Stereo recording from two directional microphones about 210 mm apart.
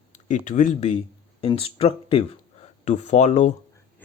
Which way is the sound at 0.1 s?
35° left (ahead or behind).